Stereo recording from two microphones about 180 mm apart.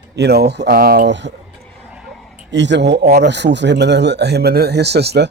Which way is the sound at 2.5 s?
80° right.